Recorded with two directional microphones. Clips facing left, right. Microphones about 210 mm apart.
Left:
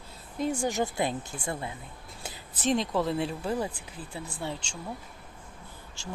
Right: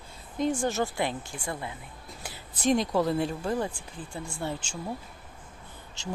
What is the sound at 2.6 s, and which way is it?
Speech, centre (ahead or behind).